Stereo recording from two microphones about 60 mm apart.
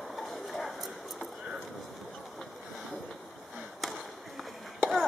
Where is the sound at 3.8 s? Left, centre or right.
Centre.